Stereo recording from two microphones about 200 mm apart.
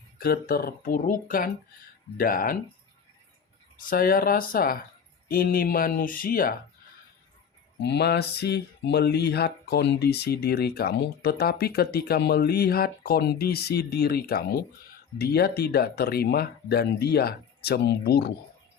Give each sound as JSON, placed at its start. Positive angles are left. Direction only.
{"t": 0.2, "sound": "speech", "side_deg": 50}
{"t": 3.8, "sound": "speech", "side_deg": 45}
{"t": 7.8, "sound": "speech", "side_deg": 55}